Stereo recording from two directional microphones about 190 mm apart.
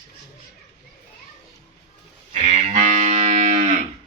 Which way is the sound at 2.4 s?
35° right (ahead or behind).